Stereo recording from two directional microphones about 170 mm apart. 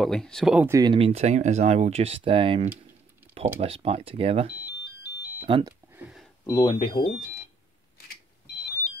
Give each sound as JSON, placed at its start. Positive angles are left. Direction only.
{"t": 0.0, "sound": "speech", "side_deg": 5}
{"t": 0.6, "sound": "speech", "side_deg": -20}
{"t": 0.9, "sound": "speech", "side_deg": -35}
{"t": 5.5, "sound": "speech", "side_deg": -20}
{"t": 5.9, "sound": "a sound", "side_deg": -5}
{"t": 6.4, "sound": "speech", "side_deg": 20}